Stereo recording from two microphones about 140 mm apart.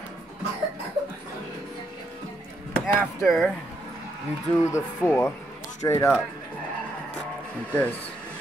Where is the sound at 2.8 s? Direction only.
5° left (ahead or behind).